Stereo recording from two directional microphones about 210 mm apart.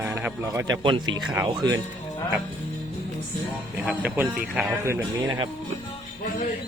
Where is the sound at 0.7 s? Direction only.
25° right (ahead or behind).